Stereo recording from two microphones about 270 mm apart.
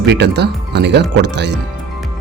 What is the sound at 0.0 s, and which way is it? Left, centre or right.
Speech, right.